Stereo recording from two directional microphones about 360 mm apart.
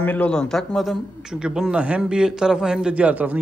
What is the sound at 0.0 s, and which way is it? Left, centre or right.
A man's voice, centre.